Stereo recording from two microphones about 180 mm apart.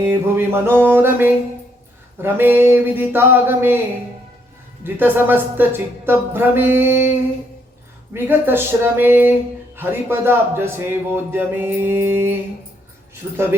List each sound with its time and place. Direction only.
0.0 s a man's voice: 10° right (ahead or behind)
4.8 s a man's voice: 10° right (ahead or behind)
8.1 s a man's voice: 10° right (ahead or behind)